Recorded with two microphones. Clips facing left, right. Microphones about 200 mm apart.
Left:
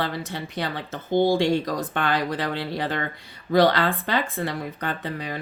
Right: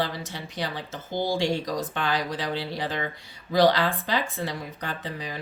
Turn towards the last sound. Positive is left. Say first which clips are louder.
# left 4 dB
turn(degrees=60)  # may be behind; listen again after turning